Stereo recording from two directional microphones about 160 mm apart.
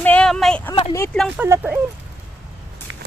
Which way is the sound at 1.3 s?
15° right (ahead or behind).